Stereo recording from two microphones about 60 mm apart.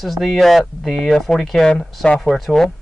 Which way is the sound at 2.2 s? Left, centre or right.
Centre.